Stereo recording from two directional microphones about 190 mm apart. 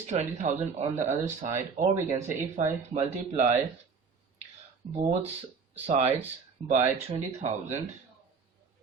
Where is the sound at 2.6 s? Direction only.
40° right (ahead or behind).